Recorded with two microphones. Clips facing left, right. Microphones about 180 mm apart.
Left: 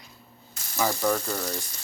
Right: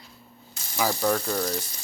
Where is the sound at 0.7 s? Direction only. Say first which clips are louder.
Right 1 dB; 5° right (ahead or behind).